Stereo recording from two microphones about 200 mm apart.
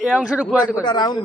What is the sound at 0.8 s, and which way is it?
Speech, 20° left (ahead or behind).